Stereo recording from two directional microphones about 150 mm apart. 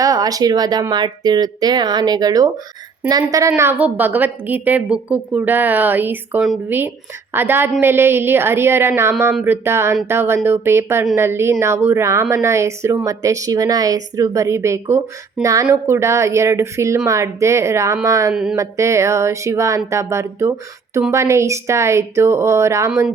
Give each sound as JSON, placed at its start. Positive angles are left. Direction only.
{"t": 0.0, "sound": "a woman's voice", "side_deg": -25}